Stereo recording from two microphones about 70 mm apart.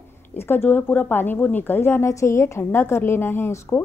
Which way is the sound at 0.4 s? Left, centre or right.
Left.